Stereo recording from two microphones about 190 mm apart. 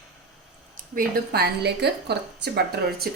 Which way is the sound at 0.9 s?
55° right (ahead or behind).